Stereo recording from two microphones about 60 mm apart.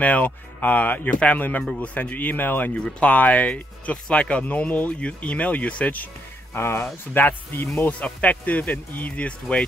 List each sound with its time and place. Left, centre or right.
0.0 s speech: left
2.7 s speech: centre
6.5 s speech: left
8.0 s speech: left